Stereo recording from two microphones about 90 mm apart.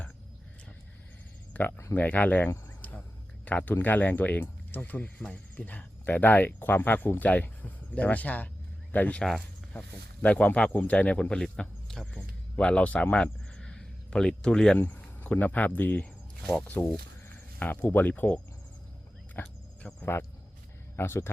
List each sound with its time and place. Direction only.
1.5 s speech: 15° left (ahead or behind)
14.8 s speech: 20° left (ahead or behind)
16.4 s speech: 5° left (ahead or behind)
16.6 s speech: 20° left (ahead or behind)
19.4 s cricket: 15° left (ahead or behind)
20.9 s speech: 30° left (ahead or behind)